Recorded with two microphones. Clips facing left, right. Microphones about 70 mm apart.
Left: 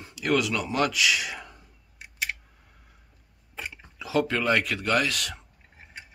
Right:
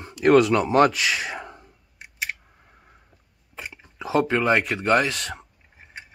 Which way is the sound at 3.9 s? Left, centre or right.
Right.